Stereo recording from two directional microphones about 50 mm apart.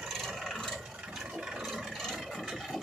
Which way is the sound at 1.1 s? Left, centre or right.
Centre.